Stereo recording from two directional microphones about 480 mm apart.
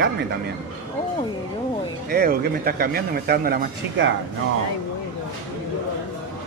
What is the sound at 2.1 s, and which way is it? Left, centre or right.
Speech, centre.